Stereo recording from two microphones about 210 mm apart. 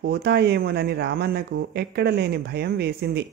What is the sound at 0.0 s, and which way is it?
Speech, 50° right (ahead or behind).